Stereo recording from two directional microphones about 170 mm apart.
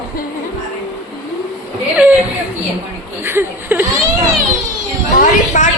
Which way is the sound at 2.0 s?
10° right (ahead or behind).